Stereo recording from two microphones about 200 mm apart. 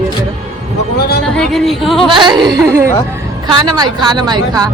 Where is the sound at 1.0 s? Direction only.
50° left (ahead or behind).